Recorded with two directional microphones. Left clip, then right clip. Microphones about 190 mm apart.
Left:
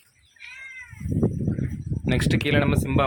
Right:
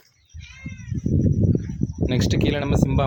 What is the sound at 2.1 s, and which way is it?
Speech, 20° right (ahead or behind).